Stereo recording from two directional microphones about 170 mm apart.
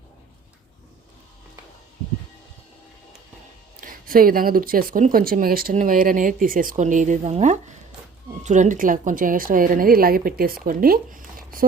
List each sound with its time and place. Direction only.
3.8 s speech: 55° right (ahead or behind)